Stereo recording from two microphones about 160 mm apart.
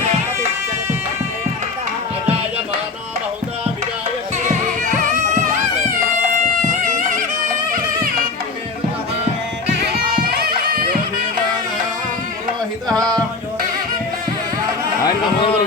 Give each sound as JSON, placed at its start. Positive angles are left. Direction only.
{"t": 4.8, "sound": "music", "side_deg": -50}
{"t": 6.4, "sound": "music", "side_deg": -50}
{"t": 9.9, "sound": "music", "side_deg": -75}
{"t": 15.0, "sound": "a sound", "side_deg": 35}